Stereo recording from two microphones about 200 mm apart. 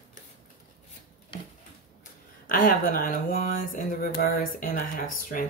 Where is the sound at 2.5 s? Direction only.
40° left (ahead or behind).